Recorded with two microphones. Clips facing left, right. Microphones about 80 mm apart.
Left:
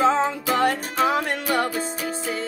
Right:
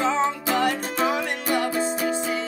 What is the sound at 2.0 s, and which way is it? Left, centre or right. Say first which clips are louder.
Music: right 3 dB; right.